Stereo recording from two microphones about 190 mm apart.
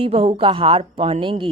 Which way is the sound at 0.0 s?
30° right (ahead or behind).